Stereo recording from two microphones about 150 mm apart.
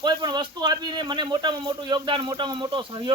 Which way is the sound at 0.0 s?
30° right (ahead or behind).